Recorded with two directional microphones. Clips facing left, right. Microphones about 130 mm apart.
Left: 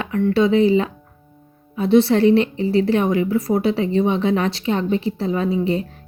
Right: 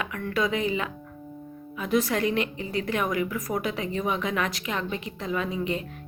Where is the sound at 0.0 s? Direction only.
30° left (ahead or behind).